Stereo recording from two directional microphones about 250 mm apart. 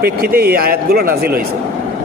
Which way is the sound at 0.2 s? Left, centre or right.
Right.